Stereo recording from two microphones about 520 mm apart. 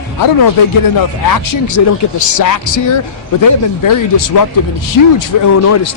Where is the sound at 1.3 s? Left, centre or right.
Left.